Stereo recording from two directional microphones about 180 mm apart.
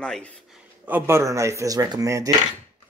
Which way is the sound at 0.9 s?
10° right (ahead or behind).